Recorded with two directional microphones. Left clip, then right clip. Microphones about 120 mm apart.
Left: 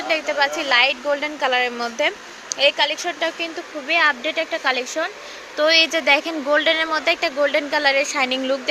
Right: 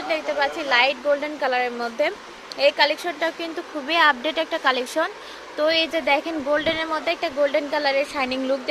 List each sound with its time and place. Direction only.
0.1 s speech: centre (ahead or behind); by 3.5 s 15° right (ahead or behind)
3.8 s speech: 30° right (ahead or behind)
5.5 s speech: 5° left (ahead or behind)